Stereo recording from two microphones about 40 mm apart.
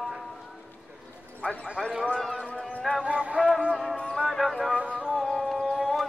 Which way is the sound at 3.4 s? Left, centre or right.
Centre.